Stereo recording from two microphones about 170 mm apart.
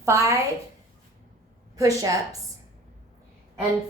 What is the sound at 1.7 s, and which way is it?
Speech, 20° right (ahead or behind).